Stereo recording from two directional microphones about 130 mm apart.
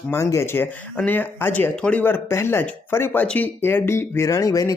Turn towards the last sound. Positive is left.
turn(degrees=25)  # may be behind; listen again after turning